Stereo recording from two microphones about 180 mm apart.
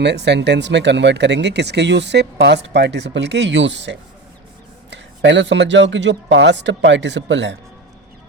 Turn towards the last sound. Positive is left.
turn(degrees=-85)